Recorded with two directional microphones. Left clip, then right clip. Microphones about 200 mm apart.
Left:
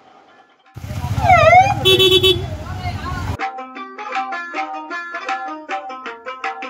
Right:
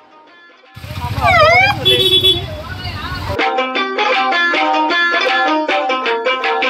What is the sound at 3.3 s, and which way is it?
Music, 50° right (ahead or behind).